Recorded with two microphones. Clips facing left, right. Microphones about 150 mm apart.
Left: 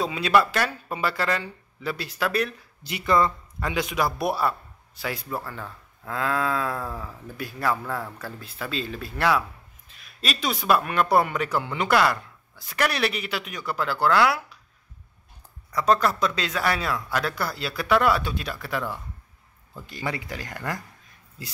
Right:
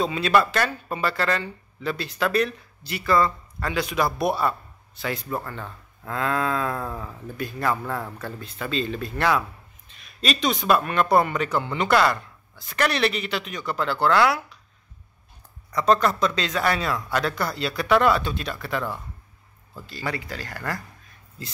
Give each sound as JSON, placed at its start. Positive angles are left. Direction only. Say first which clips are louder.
{"t": 0.0, "sound": "speech", "louder": "right 1 dB", "side_deg": 10}
{"t": 2.8, "sound": "a man's voice", "louder": "right 1 dB", "side_deg": 20}
{"t": 15.7, "sound": "a man's voice", "louder": "right 1 dB", "side_deg": 5}
{"t": 19.9, "sound": "speech", "louder": "even", "side_deg": 20}